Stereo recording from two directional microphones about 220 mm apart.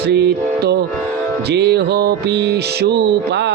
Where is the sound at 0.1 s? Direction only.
50° right (ahead or behind).